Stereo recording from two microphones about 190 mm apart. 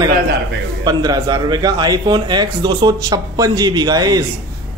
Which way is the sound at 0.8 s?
20° right (ahead or behind).